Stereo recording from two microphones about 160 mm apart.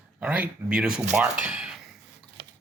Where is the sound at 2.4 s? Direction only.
90° right.